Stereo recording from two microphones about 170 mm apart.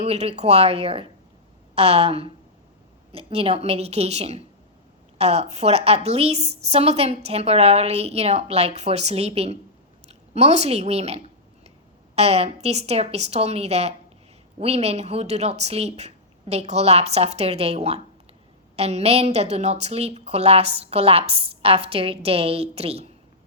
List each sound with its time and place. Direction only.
0.0 s a woman's voice: 40° right (ahead or behind)